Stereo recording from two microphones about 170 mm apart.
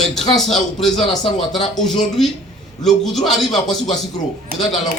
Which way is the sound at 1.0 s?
35° left (ahead or behind).